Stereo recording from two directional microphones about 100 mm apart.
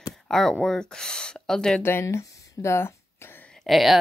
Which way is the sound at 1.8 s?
25° left (ahead or behind).